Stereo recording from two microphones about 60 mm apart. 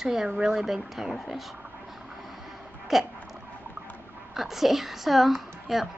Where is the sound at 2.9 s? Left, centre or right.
Centre.